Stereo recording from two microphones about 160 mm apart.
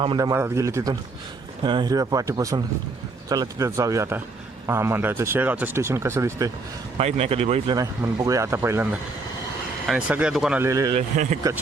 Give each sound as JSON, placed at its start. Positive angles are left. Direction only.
{"t": 0.2, "sound": "speech", "side_deg": -20}
{"t": 6.9, "sound": "speech", "side_deg": -40}
{"t": 7.7, "sound": "speech", "side_deg": -20}
{"t": 10.6, "sound": "speech", "side_deg": -20}
{"t": 11.1, "sound": "speech", "side_deg": -50}